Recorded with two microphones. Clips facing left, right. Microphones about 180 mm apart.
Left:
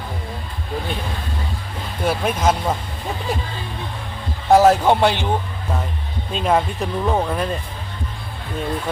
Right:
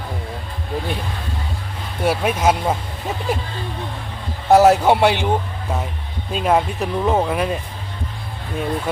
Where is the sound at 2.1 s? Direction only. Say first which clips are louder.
Right 2 dB; 10° right (ahead or behind).